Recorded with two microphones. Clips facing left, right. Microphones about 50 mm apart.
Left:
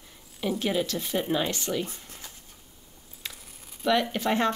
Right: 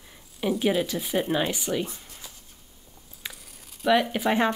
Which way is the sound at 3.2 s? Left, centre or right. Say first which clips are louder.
Right 1 dB; centre.